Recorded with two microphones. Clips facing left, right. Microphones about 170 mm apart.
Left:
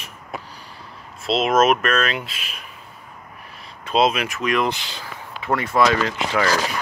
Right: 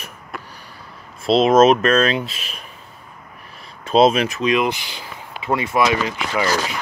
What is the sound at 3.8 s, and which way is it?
Speech, 40° right (ahead or behind).